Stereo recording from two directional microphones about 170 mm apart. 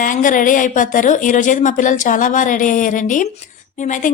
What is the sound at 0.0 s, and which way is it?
Speech, 50° left (ahead or behind).